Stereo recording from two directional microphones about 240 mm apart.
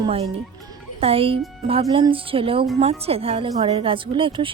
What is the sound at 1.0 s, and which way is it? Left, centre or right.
Speech, right.